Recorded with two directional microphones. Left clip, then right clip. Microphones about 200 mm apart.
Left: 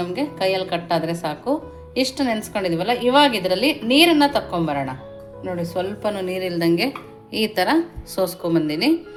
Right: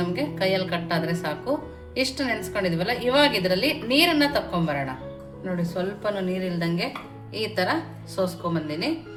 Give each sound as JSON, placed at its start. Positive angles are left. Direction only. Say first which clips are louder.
{"t": 0.0, "sound": "a woman's voice", "louder": "left 3 dB", "side_deg": 25}